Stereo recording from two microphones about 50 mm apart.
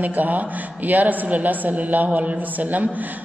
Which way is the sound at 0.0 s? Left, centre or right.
Right.